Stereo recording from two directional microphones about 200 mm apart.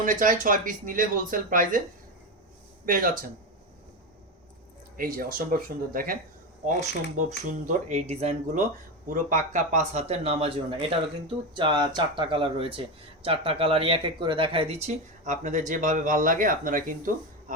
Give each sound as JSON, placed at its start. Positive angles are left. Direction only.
{"t": 0.0, "sound": "speech", "side_deg": -40}
{"t": 2.8, "sound": "speech", "side_deg": -45}
{"t": 4.9, "sound": "speech", "side_deg": -45}